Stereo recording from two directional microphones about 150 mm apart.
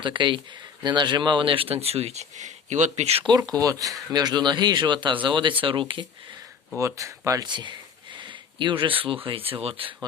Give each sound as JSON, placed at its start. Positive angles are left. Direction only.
{"t": 0.0, "sound": "speech", "side_deg": -35}
{"t": 3.3, "sound": "speech", "side_deg": -25}
{"t": 6.7, "sound": "speech", "side_deg": -20}